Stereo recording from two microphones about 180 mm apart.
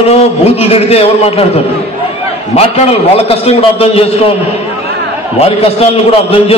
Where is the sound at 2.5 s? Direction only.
35° left (ahead or behind).